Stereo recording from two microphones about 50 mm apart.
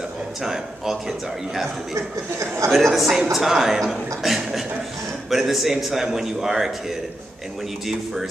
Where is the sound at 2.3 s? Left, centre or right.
Right.